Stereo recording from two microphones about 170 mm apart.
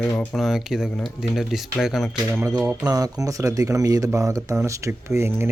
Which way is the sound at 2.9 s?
20° right (ahead or behind).